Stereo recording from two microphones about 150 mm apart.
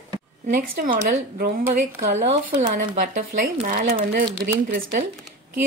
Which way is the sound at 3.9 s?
80° right.